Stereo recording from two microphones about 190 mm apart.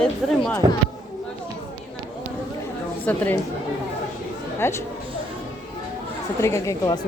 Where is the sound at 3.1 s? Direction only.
10° left (ahead or behind).